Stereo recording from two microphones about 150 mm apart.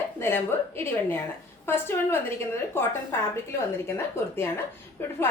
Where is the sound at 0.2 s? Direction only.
15° left (ahead or behind).